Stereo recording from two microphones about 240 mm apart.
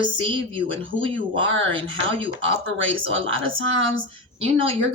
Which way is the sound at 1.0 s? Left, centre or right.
Right.